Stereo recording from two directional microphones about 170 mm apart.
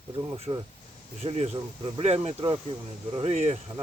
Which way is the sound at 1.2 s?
35° right (ahead or behind).